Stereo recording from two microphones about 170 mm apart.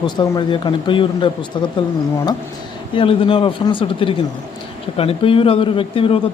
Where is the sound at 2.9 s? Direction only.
30° left (ahead or behind).